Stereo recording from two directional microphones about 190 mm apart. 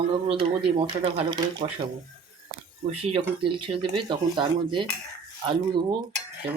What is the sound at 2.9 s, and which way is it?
Speech, 30° right (ahead or behind).